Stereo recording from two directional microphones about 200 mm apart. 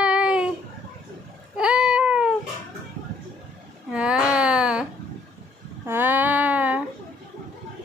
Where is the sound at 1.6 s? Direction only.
5° right (ahead or behind).